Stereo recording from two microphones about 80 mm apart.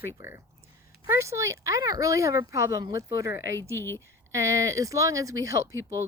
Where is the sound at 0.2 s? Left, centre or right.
Right.